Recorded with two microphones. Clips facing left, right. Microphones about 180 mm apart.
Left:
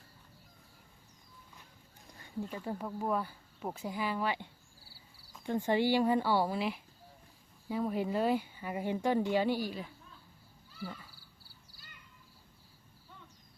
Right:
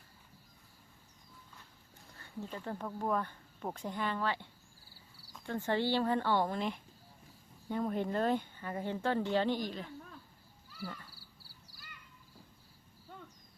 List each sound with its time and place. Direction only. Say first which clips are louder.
2.0 s speech: left 4 dB; 15° left (ahead or behind)
5.5 s speech: left 3 dB; 15° left (ahead or behind)
10.8 s speech: even; 10° left (ahead or behind)